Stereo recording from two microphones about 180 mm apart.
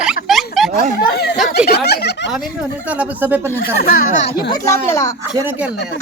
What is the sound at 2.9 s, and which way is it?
Speech, 10° right (ahead or behind).